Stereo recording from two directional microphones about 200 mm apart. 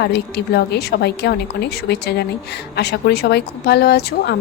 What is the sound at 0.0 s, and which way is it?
Speech, 55° left (ahead or behind).